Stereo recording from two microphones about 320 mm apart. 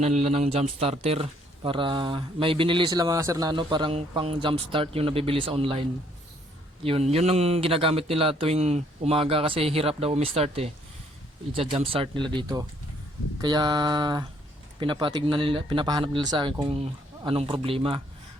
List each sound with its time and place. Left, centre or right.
0.0 s speech: centre
6.8 s speech: centre